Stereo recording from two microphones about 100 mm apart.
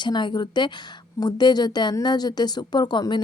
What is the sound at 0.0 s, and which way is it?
A woman's voice, 50° left (ahead or behind).